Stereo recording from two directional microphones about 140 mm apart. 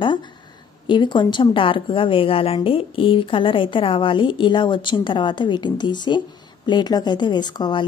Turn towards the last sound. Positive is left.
turn(degrees=30)  # may be behind; listen again after turning